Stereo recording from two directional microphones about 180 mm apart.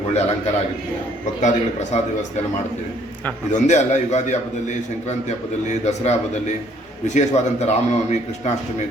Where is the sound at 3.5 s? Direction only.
40° left (ahead or behind).